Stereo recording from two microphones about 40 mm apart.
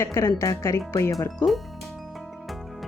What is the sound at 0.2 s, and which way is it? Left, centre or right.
Speech, left.